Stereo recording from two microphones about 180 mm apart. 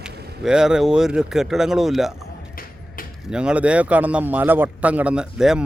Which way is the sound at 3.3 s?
5° right (ahead or behind).